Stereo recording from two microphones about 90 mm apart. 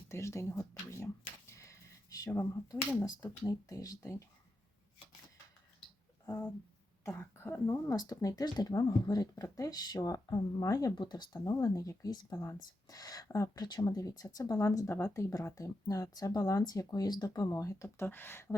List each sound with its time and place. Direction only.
0.1 s a sound: 35° left (ahead or behind)
3.0 s speech: 45° left (ahead or behind)
7.0 s speech: 30° left (ahead or behind)
7.9 s speech: 45° left (ahead or behind)
17.8 s speech: 25° left (ahead or behind)